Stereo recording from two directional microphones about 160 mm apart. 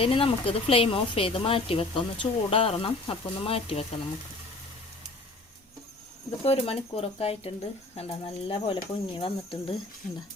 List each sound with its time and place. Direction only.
0.0 s speech: 35° left (ahead or behind)
6.4 s speech: 40° left (ahead or behind)